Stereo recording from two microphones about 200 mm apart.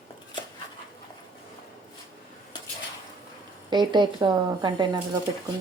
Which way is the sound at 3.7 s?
20° right (ahead or behind).